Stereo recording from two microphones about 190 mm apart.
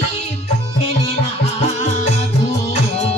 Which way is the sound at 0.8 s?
30° left (ahead or behind).